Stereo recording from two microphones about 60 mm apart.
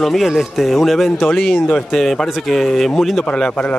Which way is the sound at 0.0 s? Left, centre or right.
Centre.